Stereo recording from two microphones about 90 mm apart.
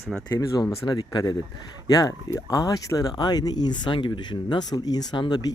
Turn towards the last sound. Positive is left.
turn(degrees=55)  # may be behind; listen again after turning